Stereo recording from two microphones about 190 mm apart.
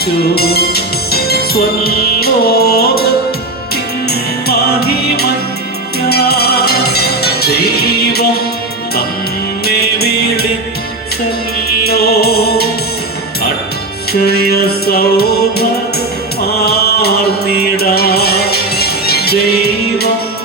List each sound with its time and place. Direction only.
0.0 s music: 55° left (ahead or behind)
4.1 s music: 55° left (ahead or behind)
9.6 s music: 55° left (ahead or behind)
11.9 s music: 55° left (ahead or behind)
14.1 s music: 55° left (ahead or behind)